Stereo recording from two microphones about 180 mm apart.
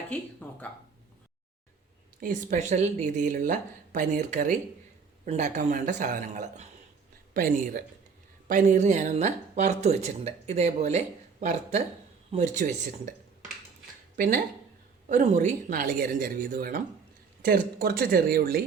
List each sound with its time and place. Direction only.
0.1 s speech: 10° left (ahead or behind)
2.2 s speech: 45° right (ahead or behind)
14.2 s speech: 45° right (ahead or behind)